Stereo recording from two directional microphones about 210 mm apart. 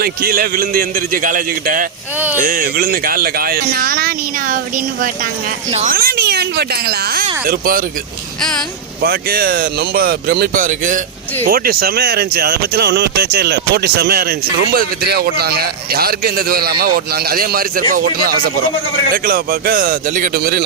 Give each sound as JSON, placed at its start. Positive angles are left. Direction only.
{"t": 0.0, "sound": "a man's voice", "side_deg": -45}
{"t": 2.1, "sound": "speech", "side_deg": -10}
{"t": 2.4, "sound": "speech", "side_deg": -40}
{"t": 5.7, "sound": "speech", "side_deg": -40}
{"t": 8.4, "sound": "speech", "side_deg": 5}
{"t": 9.0, "sound": "speech", "side_deg": -45}